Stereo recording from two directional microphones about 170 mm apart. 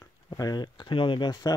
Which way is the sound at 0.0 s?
20° left (ahead or behind).